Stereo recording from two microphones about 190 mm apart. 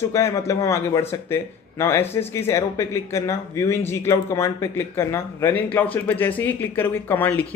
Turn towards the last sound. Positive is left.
turn(degrees=10)  # may be behind; listen again after turning